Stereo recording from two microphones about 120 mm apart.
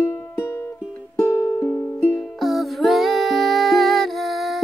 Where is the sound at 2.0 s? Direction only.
5° left (ahead or behind).